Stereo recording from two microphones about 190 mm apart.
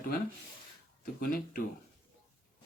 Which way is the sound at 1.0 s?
50° left (ahead or behind).